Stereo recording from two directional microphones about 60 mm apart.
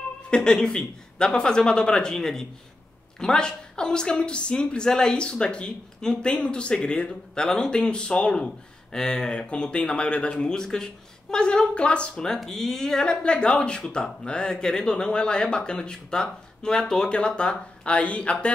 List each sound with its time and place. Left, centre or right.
0.3 s a woman's voice: centre
13.0 s a woman's voice: centre